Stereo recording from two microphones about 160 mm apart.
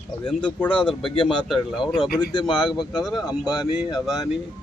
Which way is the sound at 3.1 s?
Centre (ahead or behind).